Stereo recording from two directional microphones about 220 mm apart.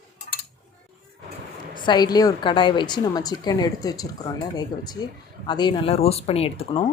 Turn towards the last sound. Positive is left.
turn(degrees=25)  # may be behind; listen again after turning